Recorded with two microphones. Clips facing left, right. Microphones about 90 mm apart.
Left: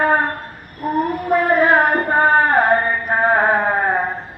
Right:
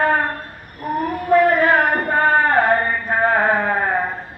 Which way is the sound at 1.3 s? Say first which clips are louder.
Right 1 dB; 20° left (ahead or behind).